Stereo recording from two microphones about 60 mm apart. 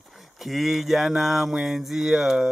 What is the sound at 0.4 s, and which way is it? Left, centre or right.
Speech, centre.